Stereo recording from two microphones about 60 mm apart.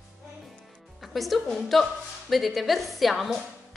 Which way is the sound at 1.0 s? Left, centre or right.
Centre.